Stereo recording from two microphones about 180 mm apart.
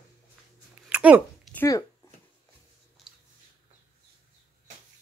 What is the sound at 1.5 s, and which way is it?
Speech, 20° left (ahead or behind).